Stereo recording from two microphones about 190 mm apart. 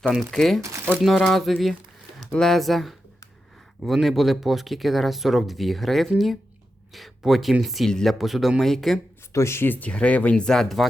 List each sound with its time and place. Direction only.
0.0 s speech: centre (ahead or behind)
0.6 s speech: 15° right (ahead or behind)
1.0 s speech: centre (ahead or behind)
9.3 s speech: 15° left (ahead or behind)